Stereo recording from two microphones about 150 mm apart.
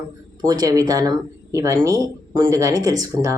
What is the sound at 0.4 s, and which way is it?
Speech, 25° right (ahead or behind).